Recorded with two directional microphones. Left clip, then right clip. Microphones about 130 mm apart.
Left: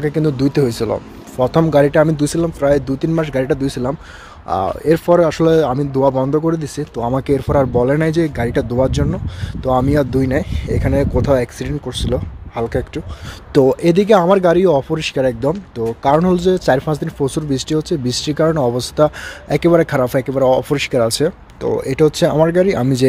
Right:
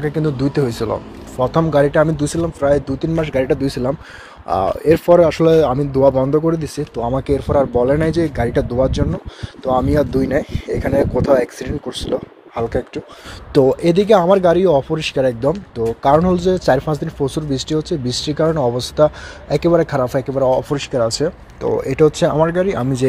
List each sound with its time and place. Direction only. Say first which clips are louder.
0.0 s speech: left 2 dB; 90° left; by 3.2 s 70° left (ahead or behind)
3.2 s speech: right 2 dB; 35° left (ahead or behind)
4.5 s speech: right 1 dB; 15° left (ahead or behind)
7.1 s speech: left 2 dB; 55° left (ahead or behind); by 16.2 s 30° left (ahead or behind)
16.2 s speech: left 1 dB; 45° left (ahead or behind); by 21.3 s 65° left (ahead or behind)
21.6 s speech: even; 35° left (ahead or behind); by 23.0 s 75° left (ahead or behind)